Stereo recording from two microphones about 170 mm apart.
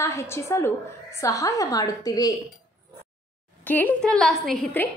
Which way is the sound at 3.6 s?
10° left (ahead or behind).